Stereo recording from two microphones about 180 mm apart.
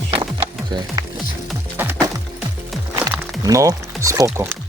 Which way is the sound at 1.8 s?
10° right (ahead or behind).